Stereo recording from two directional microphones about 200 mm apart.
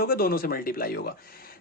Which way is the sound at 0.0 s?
50° left (ahead or behind).